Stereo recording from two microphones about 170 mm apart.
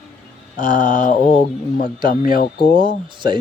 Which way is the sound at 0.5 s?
50° left (ahead or behind).